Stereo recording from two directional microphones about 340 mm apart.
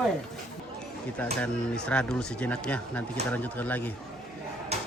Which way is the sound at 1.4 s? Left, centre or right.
Centre.